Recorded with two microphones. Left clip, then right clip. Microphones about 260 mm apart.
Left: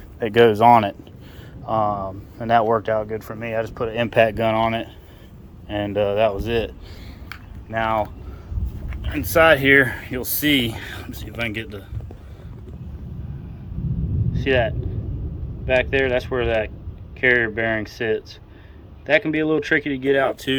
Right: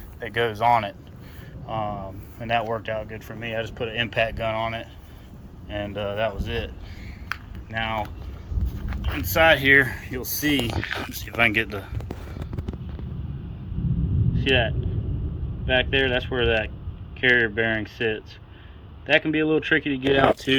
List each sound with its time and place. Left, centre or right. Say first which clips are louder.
0.2 s speech: left 9 dB; left
3.4 s speech: left 3 dB; centre; by 6.7 s left
7.3 s a sound: right 6 dB; centre
7.7 s speech: left 6 dB; centre
9.1 s speech: left 3 dB; centre
11.1 s speech: right 7 dB; centre
14.3 s speech: left 2 dB; centre
20.5 s speech: right 1 dB; centre